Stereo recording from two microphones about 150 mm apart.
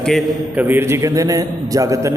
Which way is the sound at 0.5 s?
15° right (ahead or behind).